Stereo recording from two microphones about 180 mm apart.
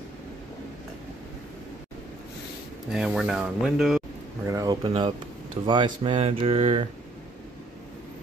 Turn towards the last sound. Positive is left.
turn(degrees=-30)  # may be behind; listen again after turning